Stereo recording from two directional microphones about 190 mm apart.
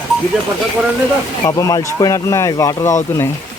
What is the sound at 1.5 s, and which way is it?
Speech, 20° left (ahead or behind).